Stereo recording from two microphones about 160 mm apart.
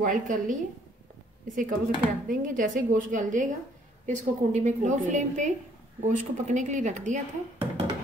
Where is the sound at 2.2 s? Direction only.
55° right (ahead or behind).